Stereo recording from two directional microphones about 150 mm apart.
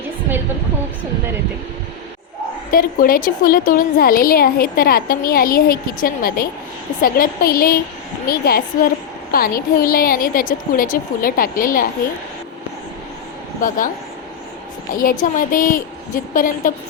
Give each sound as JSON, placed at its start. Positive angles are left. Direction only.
{"t": 2.7, "sound": "a woman's voice", "side_deg": 70}
{"t": 9.6, "sound": "a woman's voice", "side_deg": 70}
{"t": 13.6, "sound": "a woman's voice", "side_deg": 65}
{"t": 14.9, "sound": "a woman's voice", "side_deg": 65}